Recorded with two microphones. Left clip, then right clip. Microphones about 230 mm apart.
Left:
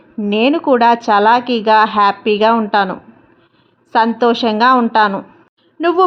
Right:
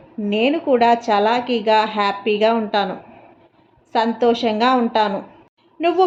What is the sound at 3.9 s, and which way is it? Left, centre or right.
A woman's voice, left.